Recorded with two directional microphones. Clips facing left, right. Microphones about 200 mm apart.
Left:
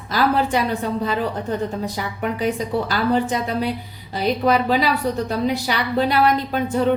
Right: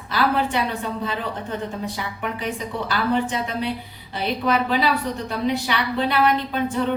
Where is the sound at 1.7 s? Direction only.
40° left (ahead or behind).